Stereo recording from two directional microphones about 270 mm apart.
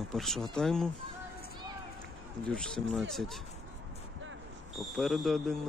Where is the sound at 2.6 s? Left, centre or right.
Centre.